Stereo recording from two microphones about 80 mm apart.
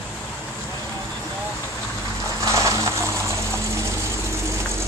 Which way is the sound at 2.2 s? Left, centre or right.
Right.